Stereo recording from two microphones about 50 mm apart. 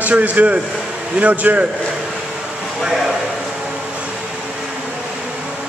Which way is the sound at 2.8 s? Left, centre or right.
Centre.